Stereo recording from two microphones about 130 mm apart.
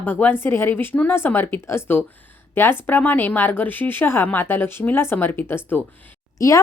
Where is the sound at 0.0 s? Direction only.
15° left (ahead or behind).